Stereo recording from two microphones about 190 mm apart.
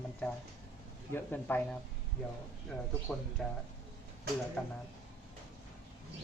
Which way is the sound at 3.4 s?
Centre (ahead or behind).